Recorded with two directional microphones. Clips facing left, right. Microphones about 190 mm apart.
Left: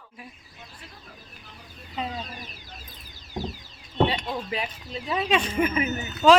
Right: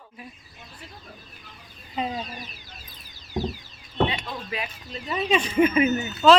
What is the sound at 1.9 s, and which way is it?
Speech, 15° right (ahead or behind).